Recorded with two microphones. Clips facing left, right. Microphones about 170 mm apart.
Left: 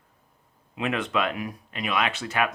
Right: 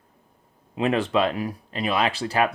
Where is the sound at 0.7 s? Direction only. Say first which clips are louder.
Right 5 dB; 35° right (ahead or behind).